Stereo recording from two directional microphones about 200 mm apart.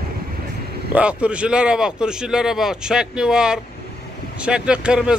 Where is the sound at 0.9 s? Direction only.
5° right (ahead or behind).